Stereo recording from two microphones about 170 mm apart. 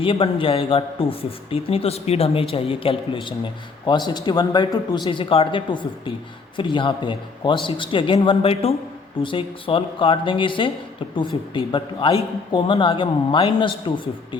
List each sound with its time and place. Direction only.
0.0 s a man's voice: 30° left (ahead or behind)